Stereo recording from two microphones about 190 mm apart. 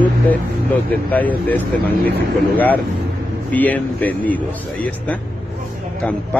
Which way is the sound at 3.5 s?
10° left (ahead or behind).